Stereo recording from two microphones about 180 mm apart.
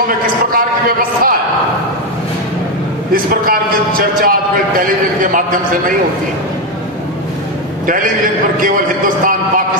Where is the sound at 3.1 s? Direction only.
55° right (ahead or behind).